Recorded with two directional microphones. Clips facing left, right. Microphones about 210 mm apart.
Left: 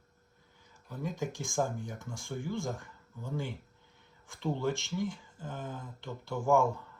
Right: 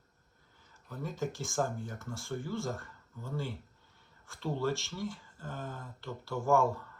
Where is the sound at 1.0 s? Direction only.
15° left (ahead or behind).